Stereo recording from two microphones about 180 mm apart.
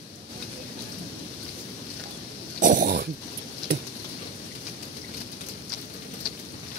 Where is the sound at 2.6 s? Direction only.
50° right (ahead or behind).